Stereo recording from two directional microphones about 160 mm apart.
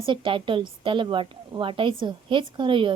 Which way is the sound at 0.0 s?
35° right (ahead or behind).